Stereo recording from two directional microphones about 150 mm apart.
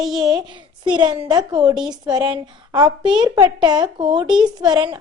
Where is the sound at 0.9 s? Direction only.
30° right (ahead or behind).